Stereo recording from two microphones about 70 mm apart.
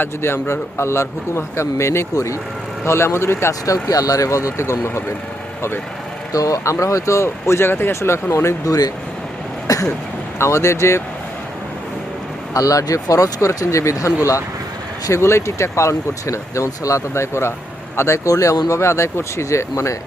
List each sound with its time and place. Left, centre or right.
0.0 s a man's voice: left
3.7 s speech: left
6.3 s speech: left
9.7 s throat clearing: left
10.3 s a man's voice: left
12.5 s speech: left
15.1 s speech: left
18.7 s speech: left